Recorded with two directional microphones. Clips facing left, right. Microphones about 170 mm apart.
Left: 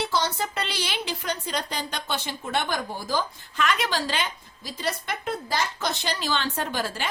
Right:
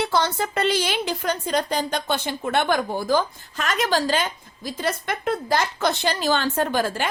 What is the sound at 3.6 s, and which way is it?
A woman's voice, 45° right (ahead or behind).